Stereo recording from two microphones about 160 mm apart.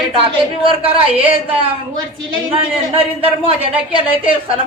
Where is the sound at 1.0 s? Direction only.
35° right (ahead or behind).